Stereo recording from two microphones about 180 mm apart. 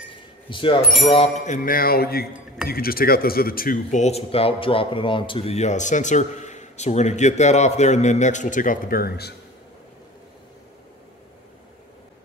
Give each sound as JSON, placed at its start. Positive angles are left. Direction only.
{"t": 0.1, "sound": "a sound", "side_deg": 30}
{"t": 1.0, "sound": "speech", "side_deg": 35}
{"t": 1.4, "sound": "music", "side_deg": 45}
{"t": 2.7, "sound": "speech", "side_deg": 55}